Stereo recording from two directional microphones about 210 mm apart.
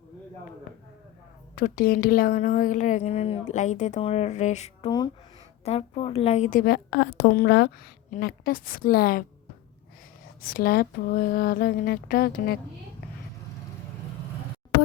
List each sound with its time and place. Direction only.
1.5 s a woman's voice: 40° left (ahead or behind)
4.9 s a woman's voice: 20° left (ahead or behind); by 9.2 s 45° left (ahead or behind)
10.4 s a woman's voice: 45° left (ahead or behind)